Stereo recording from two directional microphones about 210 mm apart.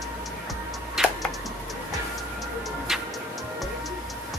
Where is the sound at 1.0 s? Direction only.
Centre (ahead or behind).